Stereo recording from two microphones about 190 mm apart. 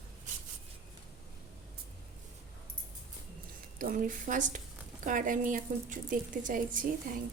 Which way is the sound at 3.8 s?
45° right (ahead or behind).